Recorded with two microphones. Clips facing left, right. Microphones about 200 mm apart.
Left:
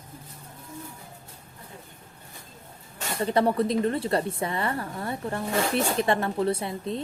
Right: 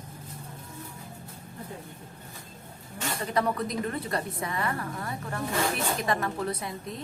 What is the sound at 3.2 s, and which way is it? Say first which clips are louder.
A woman's voice: left 6 dB; 30° left (ahead or behind).